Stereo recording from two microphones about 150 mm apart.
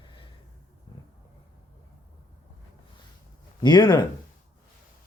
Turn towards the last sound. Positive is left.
turn(degrees=30)  # may be behind; listen again after turning